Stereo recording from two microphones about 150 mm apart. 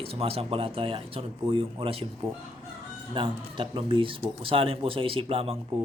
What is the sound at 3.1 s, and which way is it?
Speech, 35° right (ahead or behind).